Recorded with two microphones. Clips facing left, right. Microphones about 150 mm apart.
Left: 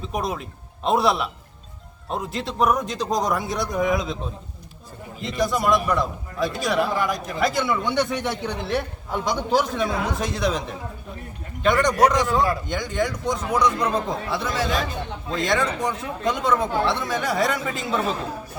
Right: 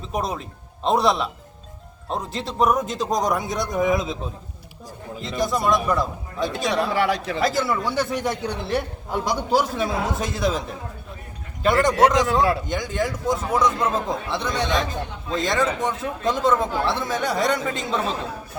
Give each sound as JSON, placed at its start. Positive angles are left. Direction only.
{"t": 0.0, "sound": "a man's voice", "side_deg": 0}
{"t": 6.9, "sound": "speech", "side_deg": -75}
{"t": 7.3, "sound": "a man's voice", "side_deg": 0}
{"t": 11.8, "sound": "a man's voice", "side_deg": 0}